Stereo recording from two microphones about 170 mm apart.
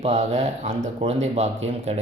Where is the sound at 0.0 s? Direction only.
40° right (ahead or behind).